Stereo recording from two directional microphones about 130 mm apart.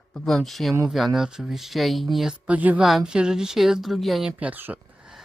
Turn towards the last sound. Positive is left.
turn(degrees=-15)  # may be behind; listen again after turning